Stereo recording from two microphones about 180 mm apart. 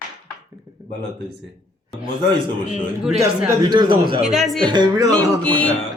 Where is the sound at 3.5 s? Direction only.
25° right (ahead or behind).